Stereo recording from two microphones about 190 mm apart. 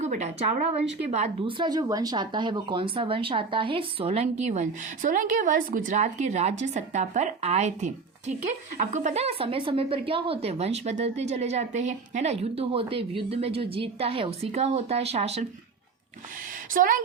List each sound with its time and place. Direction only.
0.0 s speech: 35° right (ahead or behind)
16.7 s a woman's voice: 45° right (ahead or behind)